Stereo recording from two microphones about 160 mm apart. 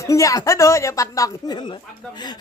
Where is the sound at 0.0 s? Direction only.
20° left (ahead or behind).